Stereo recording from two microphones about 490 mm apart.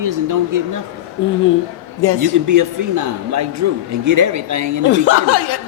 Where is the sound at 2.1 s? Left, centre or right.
Right.